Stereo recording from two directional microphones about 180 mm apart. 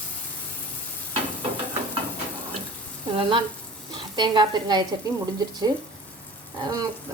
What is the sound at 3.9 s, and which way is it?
Speech, 25° right (ahead or behind).